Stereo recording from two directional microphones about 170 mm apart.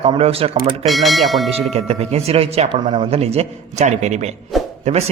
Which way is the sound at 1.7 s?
40° right (ahead or behind).